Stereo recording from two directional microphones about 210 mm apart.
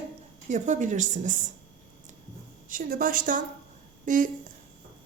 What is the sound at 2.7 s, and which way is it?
A woman's voice, 40° right (ahead or behind).